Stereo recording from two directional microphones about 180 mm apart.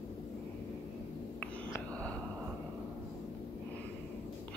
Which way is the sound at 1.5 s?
5° left (ahead or behind).